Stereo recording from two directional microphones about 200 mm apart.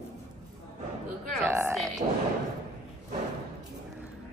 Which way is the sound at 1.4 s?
15° right (ahead or behind).